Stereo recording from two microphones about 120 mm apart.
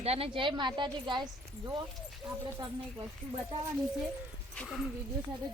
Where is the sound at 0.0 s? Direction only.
55° right (ahead or behind).